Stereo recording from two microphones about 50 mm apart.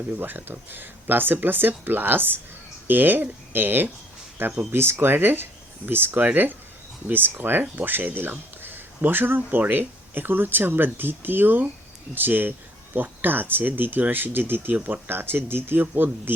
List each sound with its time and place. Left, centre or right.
0.2 s speech: right